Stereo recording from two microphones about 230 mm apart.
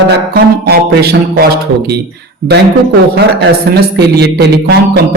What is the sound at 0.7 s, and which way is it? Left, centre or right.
Speech, right.